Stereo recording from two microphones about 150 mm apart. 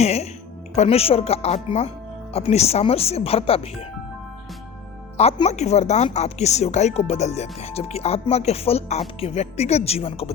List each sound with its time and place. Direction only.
0.0 s music: 45° left (ahead or behind)
0.8 s speech: 40° left (ahead or behind)
5.1 s speech: 45° left (ahead or behind)